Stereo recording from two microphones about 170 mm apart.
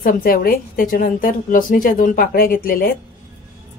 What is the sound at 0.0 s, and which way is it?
Speech, 60° left (ahead or behind).